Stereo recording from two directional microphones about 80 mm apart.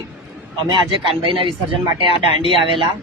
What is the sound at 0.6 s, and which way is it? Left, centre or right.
Speech, right.